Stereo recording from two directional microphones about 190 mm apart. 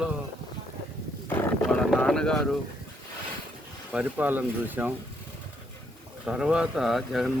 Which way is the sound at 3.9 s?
10° right (ahead or behind).